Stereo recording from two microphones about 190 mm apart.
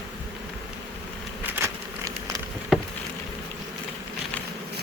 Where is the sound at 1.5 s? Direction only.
15° right (ahead or behind).